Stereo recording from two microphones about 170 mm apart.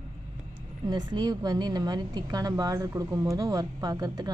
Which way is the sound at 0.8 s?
25° right (ahead or behind).